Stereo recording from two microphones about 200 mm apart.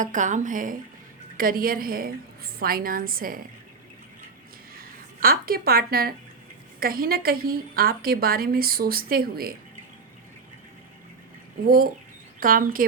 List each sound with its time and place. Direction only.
0.0 s a woman's voice: 40° right (ahead or behind)
4.7 s a sound: 45° right (ahead or behind)
6.7 s a woman's voice: 45° right (ahead or behind)
11.6 s a woman's voice: 45° right (ahead or behind)